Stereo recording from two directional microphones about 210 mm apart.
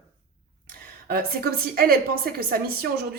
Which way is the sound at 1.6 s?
45° right (ahead or behind).